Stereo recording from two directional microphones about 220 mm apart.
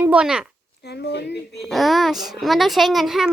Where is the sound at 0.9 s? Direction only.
50° left (ahead or behind).